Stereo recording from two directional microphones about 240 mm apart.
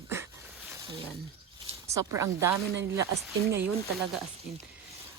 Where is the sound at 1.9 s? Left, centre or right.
Centre.